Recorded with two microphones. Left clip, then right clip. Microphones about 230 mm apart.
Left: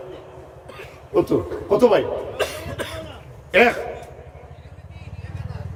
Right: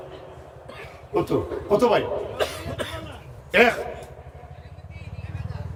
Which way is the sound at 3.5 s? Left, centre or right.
Centre.